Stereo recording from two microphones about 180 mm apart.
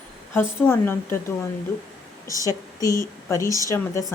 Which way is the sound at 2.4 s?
20° left (ahead or behind).